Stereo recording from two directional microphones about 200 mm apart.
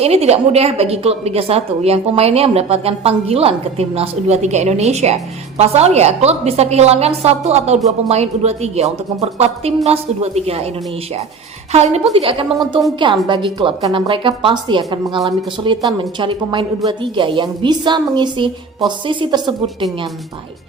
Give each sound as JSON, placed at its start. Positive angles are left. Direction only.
{"t": 0.0, "sound": "a woman's voice", "side_deg": -30}
{"t": 11.7, "sound": "a woman's voice", "side_deg": -30}